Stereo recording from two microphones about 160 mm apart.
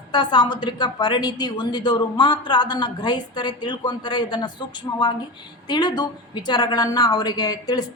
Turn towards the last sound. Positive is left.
turn(degrees=25)  # may be behind; listen again after turning